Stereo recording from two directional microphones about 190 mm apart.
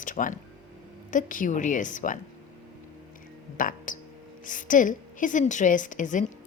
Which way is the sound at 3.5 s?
45° left (ahead or behind).